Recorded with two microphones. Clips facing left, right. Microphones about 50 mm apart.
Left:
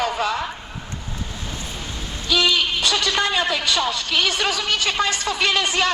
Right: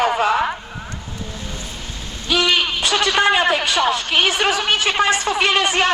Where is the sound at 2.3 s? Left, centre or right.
Right.